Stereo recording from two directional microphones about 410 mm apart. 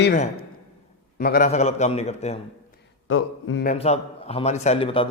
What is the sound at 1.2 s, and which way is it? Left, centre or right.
A man's voice, left.